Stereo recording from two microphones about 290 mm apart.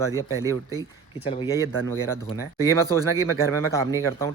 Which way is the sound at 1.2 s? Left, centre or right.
Centre.